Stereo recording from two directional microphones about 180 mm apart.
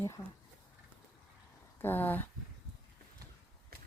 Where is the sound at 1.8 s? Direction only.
10° left (ahead or behind).